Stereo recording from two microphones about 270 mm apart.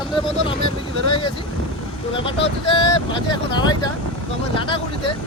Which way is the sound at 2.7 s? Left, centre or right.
Centre.